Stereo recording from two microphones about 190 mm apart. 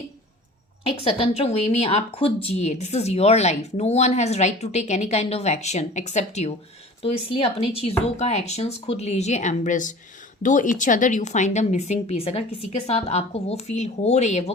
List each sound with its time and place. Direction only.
0.9 s speech: 30° left (ahead or behind)